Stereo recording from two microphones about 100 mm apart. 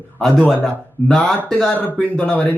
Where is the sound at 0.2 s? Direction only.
Centre (ahead or behind).